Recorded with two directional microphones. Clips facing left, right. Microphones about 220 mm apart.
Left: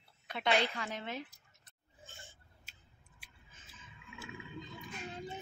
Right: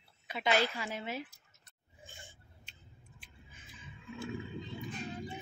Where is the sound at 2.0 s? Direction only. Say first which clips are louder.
Right 1 dB; 15° right (ahead or behind).